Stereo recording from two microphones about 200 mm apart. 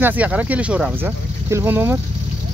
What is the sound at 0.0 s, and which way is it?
Speech, 10° right (ahead or behind).